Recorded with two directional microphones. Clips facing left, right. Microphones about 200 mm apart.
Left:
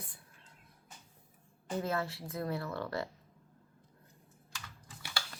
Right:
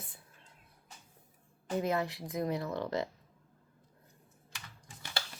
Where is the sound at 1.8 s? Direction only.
15° right (ahead or behind).